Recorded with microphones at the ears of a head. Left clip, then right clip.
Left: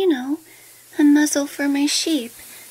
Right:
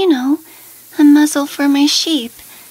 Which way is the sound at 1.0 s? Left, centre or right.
Right.